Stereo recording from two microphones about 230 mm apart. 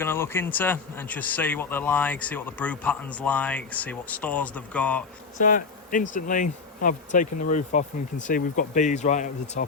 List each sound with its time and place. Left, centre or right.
0.0 s a man's voice: centre
5.4 s speech: left